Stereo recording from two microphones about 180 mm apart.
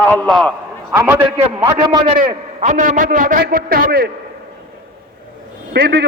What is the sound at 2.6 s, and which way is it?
A man's voice, 45° right (ahead or behind).